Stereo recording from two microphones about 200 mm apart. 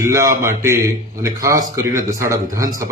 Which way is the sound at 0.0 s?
15° right (ahead or behind).